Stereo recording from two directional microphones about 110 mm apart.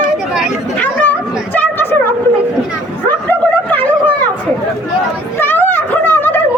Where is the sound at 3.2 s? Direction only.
15° left (ahead or behind).